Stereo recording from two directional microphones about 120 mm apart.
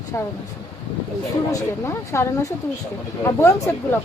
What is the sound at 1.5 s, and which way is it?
A woman's voice, 25° left (ahead or behind).